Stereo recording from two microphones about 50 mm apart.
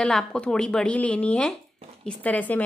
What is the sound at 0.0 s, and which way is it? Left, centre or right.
A woman's voice, centre.